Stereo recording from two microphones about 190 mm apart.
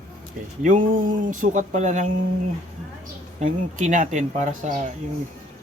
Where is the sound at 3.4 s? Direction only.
40° right (ahead or behind).